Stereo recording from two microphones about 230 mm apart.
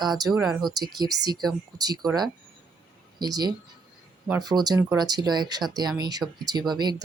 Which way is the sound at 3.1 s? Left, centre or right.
Centre.